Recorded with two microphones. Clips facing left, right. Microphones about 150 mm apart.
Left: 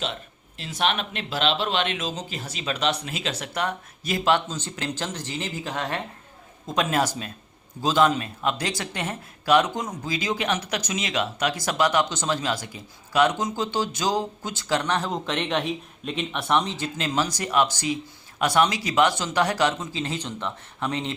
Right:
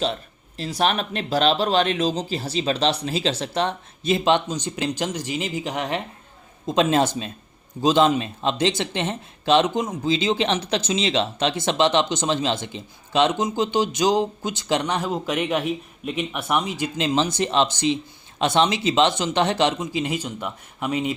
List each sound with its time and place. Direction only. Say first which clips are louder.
0.0 s speech: right 6 dB; 35° right (ahead or behind); by 21.1 s 10° right (ahead or behind)